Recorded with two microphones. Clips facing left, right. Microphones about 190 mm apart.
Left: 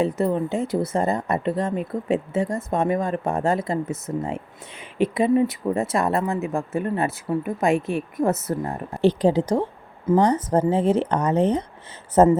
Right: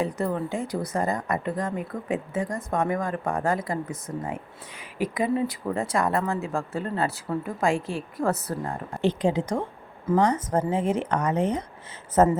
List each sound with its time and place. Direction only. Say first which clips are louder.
0.0 s speech: left 5 dB; 20° left (ahead or behind)
9.0 s speech: left 5 dB; 35° left (ahead or behind)